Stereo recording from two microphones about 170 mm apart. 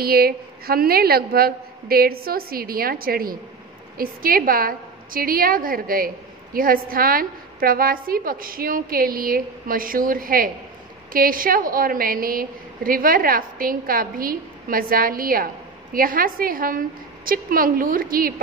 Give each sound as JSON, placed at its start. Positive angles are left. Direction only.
{"t": 0.0, "sound": "a woman's voice", "side_deg": -65}